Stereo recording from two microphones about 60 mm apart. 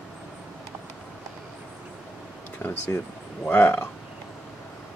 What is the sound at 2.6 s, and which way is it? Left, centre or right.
Speech, left.